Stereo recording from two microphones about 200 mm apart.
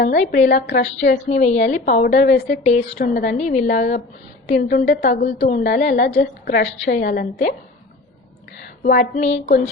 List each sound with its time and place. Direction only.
0.0 s a woman's voice: 45° left (ahead or behind)
0.5 s a woman's voice: 60° left (ahead or behind)
1.1 s a woman's voice: 35° left (ahead or behind)
3.3 s a woman's voice: 35° left (ahead or behind)
5.2 s a woman's voice: 35° left (ahead or behind)
5.9 s a woman's voice: 55° left (ahead or behind)
8.8 s a woman's voice: 40° left (ahead or behind)
9.3 s a woman's voice: 55° left (ahead or behind)